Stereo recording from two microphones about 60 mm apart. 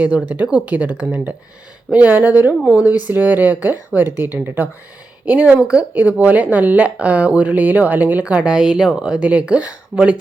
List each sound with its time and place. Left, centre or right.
0.6 s speech: right